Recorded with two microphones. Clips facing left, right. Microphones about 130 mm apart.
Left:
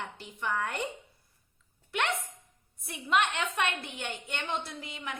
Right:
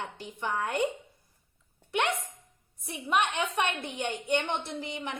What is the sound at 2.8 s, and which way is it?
A woman's voice, 15° right (ahead or behind).